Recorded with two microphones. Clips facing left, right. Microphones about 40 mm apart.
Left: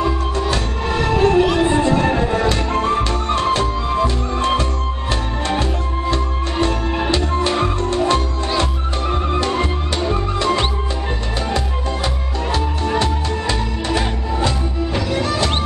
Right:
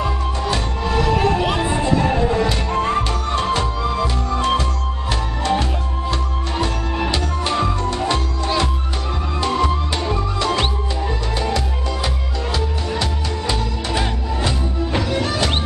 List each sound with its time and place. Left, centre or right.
0.9 s music: left
10.1 s music: left
12.5 s music: left
14.4 s music: centre